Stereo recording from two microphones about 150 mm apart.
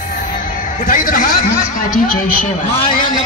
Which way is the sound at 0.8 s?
65° left (ahead or behind).